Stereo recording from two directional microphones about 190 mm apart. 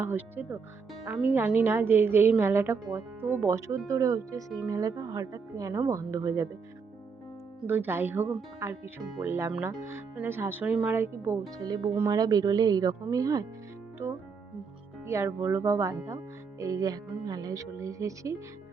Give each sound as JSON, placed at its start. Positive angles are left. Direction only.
{"t": 0.0, "sound": "speech", "side_deg": -10}
{"t": 7.7, "sound": "speech", "side_deg": -10}